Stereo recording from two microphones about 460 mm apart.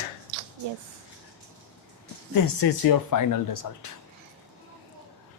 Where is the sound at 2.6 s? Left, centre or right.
Left.